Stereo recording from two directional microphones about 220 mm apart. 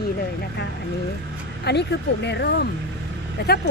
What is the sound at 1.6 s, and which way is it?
Speech, 50° left (ahead or behind).